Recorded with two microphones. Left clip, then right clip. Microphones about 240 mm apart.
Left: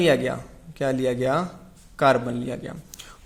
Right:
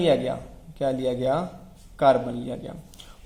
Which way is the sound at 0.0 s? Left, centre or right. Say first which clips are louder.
Left 1 dB; left.